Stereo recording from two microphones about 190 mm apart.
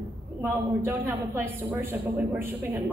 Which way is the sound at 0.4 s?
10° right (ahead or behind).